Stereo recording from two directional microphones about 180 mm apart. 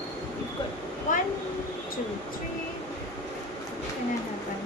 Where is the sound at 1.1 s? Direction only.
45° left (ahead or behind).